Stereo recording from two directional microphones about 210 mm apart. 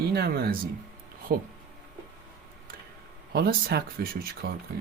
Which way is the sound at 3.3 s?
45° right (ahead or behind).